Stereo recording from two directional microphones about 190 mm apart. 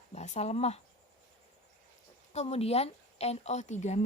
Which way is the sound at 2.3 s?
35° left (ahead or behind).